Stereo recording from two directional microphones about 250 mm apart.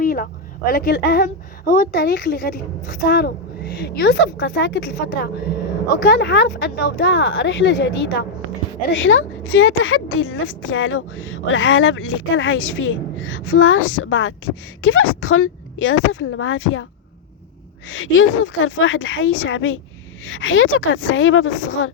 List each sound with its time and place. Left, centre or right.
0.0 s a woman's voice: left
17.8 s a woman's voice: left